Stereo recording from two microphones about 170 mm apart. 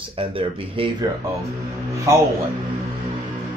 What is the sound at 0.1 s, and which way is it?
Speech, 30° right (ahead or behind).